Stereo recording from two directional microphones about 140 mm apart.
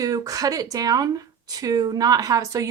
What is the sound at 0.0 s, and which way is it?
Speech, 25° right (ahead or behind).